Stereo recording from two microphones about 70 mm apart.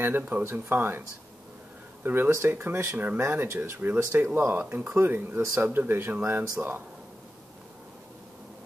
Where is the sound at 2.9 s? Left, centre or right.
Centre.